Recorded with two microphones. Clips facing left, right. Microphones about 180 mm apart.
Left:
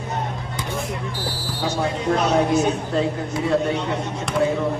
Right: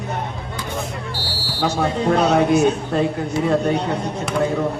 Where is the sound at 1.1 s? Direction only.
75° right (ahead or behind).